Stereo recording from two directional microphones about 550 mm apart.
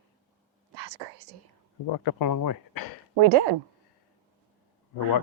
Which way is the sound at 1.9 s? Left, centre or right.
Left.